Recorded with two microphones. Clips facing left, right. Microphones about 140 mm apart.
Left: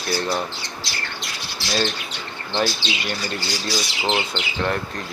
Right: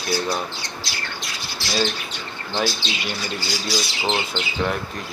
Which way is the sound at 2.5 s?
5° right (ahead or behind).